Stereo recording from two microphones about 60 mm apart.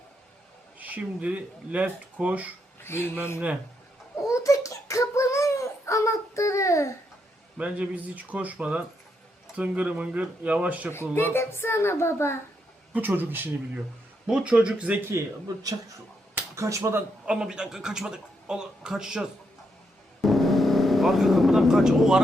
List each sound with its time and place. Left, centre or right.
0.8 s speech: right
2.8 s speech: left
4.3 s a sound: left
7.6 s a man's voice: right
10.9 s speech: left
13.0 s speech: right
14.3 s a man's voice: centre
15.2 s speech: right
16.6 s speech: right
17.2 s a man's voice: centre
20.2 s vehicle: centre